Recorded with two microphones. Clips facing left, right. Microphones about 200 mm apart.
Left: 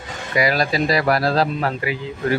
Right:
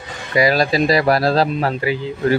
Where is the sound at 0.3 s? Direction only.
30° right (ahead or behind).